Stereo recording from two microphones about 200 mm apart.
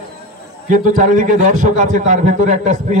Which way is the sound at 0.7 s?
40° right (ahead or behind).